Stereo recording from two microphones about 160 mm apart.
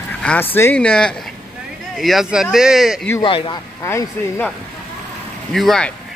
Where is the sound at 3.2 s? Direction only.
30° left (ahead or behind).